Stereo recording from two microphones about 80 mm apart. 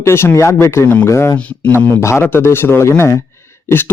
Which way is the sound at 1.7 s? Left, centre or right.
Left.